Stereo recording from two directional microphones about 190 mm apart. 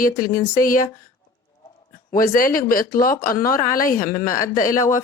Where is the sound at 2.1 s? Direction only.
45° left (ahead or behind).